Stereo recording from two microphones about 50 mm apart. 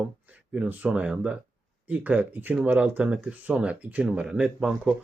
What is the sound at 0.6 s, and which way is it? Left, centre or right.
Speech, right.